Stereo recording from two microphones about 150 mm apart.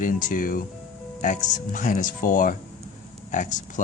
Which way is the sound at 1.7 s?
60° left (ahead or behind).